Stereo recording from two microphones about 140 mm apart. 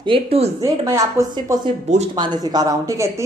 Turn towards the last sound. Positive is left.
turn(degrees=-25)  # may be behind; listen again after turning